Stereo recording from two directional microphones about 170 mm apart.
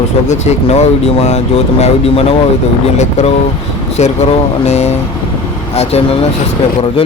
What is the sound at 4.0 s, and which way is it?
Speech, 40° left (ahead or behind).